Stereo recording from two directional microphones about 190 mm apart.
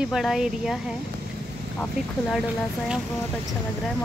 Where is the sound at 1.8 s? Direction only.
Centre (ahead or behind).